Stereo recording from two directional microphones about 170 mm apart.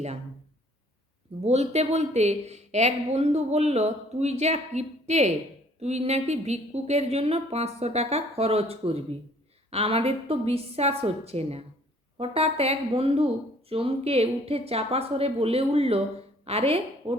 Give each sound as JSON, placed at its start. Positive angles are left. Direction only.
{"t": 1.5, "sound": "a woman's voice", "side_deg": -40}